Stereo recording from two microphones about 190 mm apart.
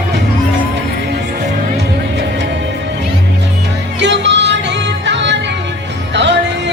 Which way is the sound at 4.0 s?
65° right (ahead or behind).